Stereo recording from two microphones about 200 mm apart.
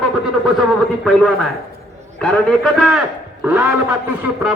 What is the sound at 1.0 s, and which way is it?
A man's voice, 5° left (ahead or behind).